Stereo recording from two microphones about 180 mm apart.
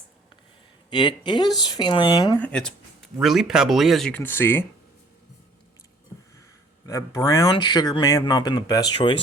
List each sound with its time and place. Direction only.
0.9 s speech: 25° left (ahead or behind)
2.4 s speech: 5° left (ahead or behind)
6.8 s speech: 20° left (ahead or behind)